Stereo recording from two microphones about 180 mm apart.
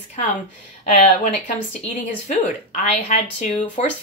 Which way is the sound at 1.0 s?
40° left (ahead or behind).